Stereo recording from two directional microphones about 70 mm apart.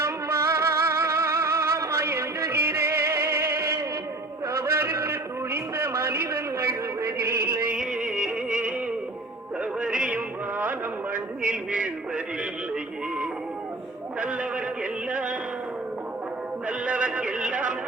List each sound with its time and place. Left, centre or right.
0.0 s music: right
4.5 s a sound: right
6.7 s music: right
7.8 s music: centre
9.8 s music: centre
11.7 s a sound: centre
14.2 s a sound: centre
15.1 s music: centre
16.6 s music: centre